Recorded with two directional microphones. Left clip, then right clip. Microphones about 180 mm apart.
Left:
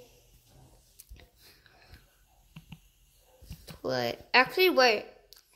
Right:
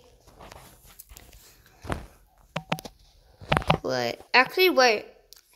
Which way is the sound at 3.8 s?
10° right (ahead or behind).